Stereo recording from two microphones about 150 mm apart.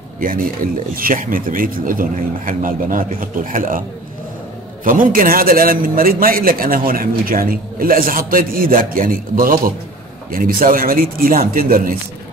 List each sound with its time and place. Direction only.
0.2 s a man's voice: 65° right (ahead or behind)
4.8 s a man's voice: 65° right (ahead or behind)